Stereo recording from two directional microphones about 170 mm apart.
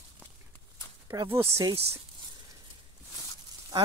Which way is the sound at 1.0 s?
20° right (ahead or behind).